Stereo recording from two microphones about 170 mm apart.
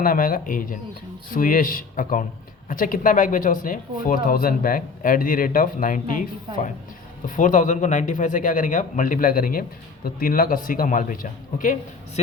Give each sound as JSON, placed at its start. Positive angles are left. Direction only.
{"t": 0.0, "sound": "a man's voice", "side_deg": 55}
{"t": 7.3, "sound": "a man's voice", "side_deg": 50}